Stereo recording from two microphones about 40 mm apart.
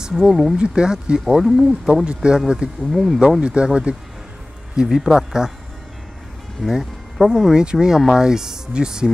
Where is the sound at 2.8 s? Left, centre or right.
Centre.